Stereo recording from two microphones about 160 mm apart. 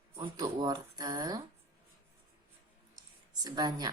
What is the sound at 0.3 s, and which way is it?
A woman's voice, 25° right (ahead or behind).